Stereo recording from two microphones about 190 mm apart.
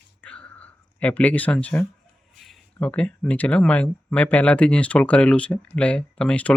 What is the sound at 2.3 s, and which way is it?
Speech, centre (ahead or behind).